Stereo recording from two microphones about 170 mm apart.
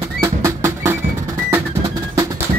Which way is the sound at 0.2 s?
15° right (ahead or behind).